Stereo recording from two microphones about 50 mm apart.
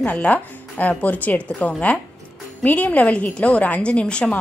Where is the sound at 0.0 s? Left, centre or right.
Left.